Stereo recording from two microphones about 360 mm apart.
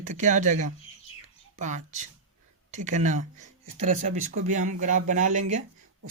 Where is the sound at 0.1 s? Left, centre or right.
Centre.